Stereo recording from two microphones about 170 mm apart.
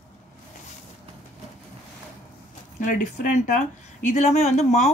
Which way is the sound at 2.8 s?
50° left (ahead or behind).